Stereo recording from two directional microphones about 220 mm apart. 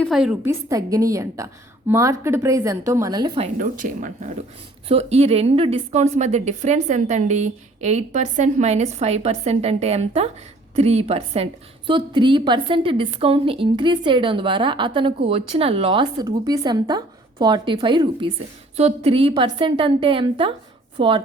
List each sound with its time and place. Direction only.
0.0 s a woman's voice: centre (ahead or behind)
0.7 s a woman's voice: 15° right (ahead or behind)